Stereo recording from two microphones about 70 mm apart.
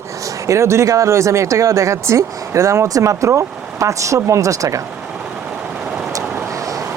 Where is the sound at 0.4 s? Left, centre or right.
Right.